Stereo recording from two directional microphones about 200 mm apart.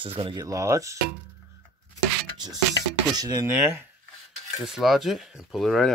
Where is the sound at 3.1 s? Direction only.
20° right (ahead or behind).